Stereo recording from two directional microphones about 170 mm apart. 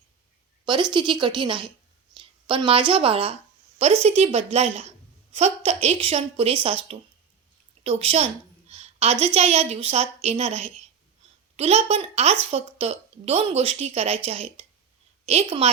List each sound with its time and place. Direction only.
0.6 s a woman's voice: 25° right (ahead or behind)
8.7 s a sound: 40° right (ahead or behind)
9.2 s a woman's voice: 40° right (ahead or behind)